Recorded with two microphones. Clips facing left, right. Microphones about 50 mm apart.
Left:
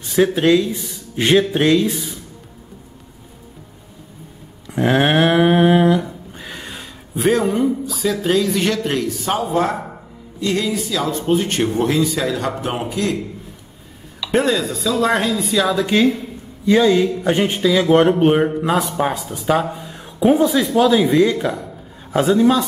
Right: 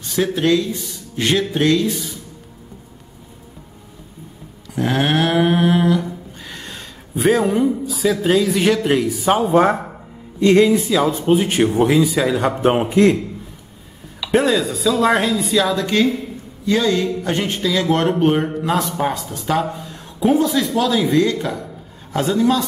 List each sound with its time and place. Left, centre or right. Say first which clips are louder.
0.1 s speech: left 3 dB; centre
4.6 s a sound: left 3 dB; centre
7.2 s a man's voice: right 1 dB; centre
9.4 s a man's voice: right 5 dB; right
12.9 s a man's voice: right 8 dB; right
14.2 s a man's voice: right 1 dB; centre